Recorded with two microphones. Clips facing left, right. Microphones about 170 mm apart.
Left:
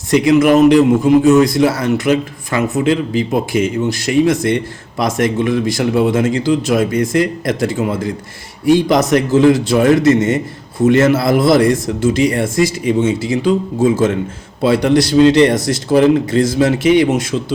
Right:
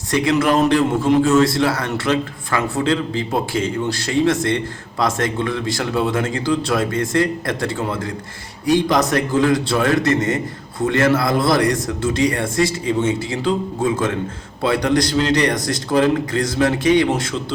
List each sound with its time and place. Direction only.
0.1 s a man's voice: 20° left (ahead or behind)
14.6 s a man's voice: 25° left (ahead or behind)